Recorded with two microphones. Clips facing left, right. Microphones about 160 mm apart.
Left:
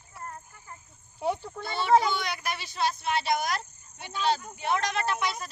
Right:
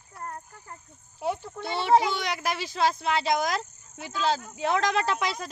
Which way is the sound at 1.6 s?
80° right.